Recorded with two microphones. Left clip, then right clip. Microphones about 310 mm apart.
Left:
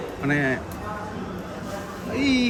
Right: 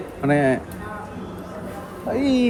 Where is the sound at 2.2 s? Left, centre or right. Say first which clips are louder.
Right 1 dB; centre.